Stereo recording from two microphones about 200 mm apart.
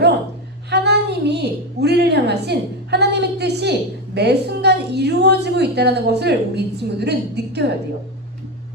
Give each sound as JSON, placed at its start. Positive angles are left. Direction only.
{"t": 0.7, "sound": "a woman's voice", "side_deg": -55}